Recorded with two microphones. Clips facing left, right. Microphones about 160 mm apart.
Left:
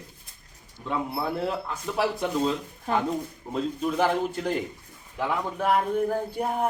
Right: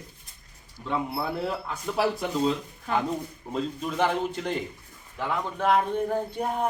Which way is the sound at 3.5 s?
5° left (ahead or behind).